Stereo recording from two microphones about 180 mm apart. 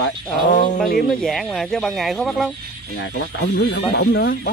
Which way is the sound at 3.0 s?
75° left (ahead or behind).